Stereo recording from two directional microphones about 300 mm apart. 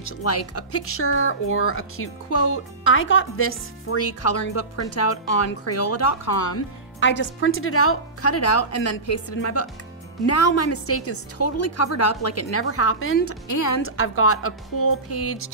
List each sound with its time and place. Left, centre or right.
0.0 s speech: left
6.5 s speech: left
13.5 s a woman's voice: left
13.8 s speech: left